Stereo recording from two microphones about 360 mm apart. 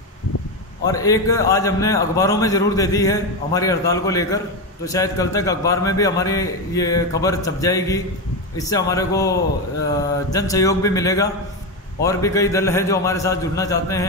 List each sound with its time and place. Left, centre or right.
0.8 s a man's voice: centre